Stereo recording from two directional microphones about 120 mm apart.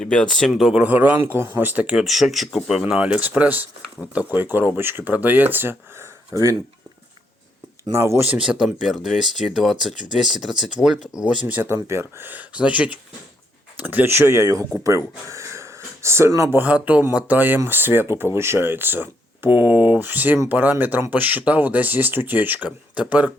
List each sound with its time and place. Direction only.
0.0 s speech: 5° left (ahead or behind); by 6.6 s 25° right (ahead or behind)
7.9 s speech: 20° right (ahead or behind)
8.4 s speech: 5° right (ahead or behind)
11.4 s speech: 15° right (ahead or behind)
16.6 s speech: 15° right (ahead or behind)